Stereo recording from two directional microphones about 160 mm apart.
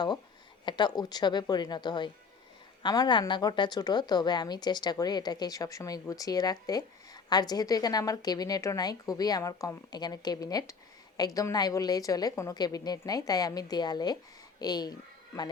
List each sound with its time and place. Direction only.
0.6 s a woman's voice: 30° left (ahead or behind)